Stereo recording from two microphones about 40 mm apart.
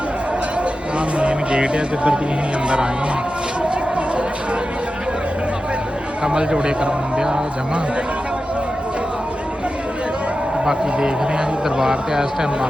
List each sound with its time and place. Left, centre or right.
0.6 s a sound: right
2.6 s speech: right
6.2 s a man's voice: centre
11.8 s a man's voice: centre